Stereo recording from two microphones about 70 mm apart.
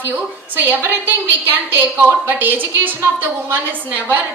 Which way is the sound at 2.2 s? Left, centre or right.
Right.